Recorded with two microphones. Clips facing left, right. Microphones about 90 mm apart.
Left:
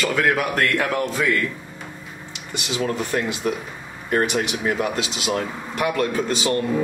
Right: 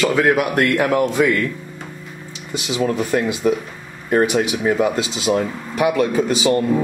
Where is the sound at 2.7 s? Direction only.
10° right (ahead or behind).